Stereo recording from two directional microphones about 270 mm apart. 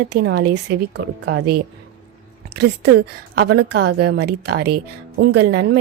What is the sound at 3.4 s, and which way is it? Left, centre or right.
Speech, right.